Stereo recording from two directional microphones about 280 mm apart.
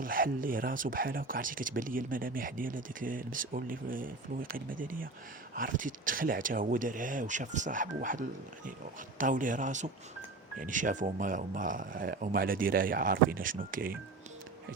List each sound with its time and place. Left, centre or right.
0.0 s speech: right